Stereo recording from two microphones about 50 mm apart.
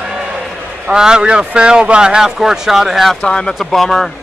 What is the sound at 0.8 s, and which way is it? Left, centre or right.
Speech, centre.